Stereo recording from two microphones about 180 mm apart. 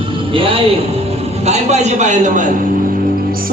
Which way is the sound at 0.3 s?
30° right (ahead or behind).